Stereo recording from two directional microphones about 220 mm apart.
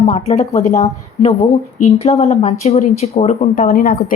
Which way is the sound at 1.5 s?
30° left (ahead or behind).